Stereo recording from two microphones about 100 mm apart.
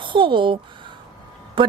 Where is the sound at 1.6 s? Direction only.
55° right (ahead or behind).